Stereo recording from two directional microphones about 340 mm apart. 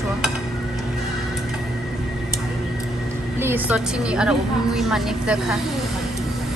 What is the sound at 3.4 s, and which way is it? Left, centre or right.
A woman's voice, centre.